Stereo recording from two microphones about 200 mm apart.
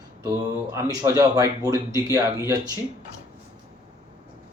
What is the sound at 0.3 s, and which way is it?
Speech, 15° right (ahead or behind).